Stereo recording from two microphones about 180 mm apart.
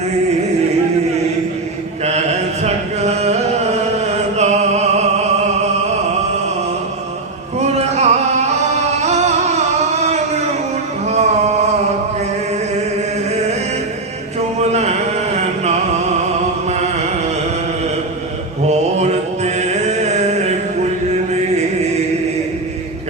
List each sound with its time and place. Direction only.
2.6 s chant: 35° right (ahead or behind)
4.4 s music: 40° right (ahead or behind)
7.9 s music: 40° right (ahead or behind)
11.0 s a sound: 40° right (ahead or behind)
14.6 s chant: 35° right (ahead or behind)
18.6 s a sound: 35° right (ahead or behind)